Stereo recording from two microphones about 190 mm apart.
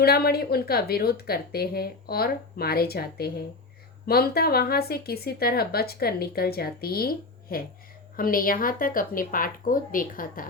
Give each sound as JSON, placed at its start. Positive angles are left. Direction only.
{"t": 0.0, "sound": "a woman's voice", "side_deg": 55}